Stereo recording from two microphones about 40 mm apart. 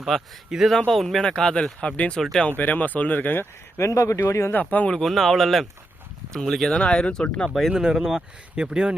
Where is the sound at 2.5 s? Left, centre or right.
Left.